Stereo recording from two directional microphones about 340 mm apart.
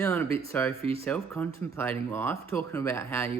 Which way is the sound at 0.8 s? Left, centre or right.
Centre.